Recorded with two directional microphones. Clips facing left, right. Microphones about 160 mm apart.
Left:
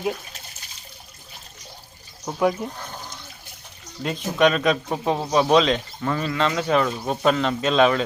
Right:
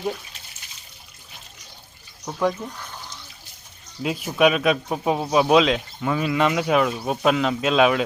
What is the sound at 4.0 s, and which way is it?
Speech, 5° right (ahead or behind).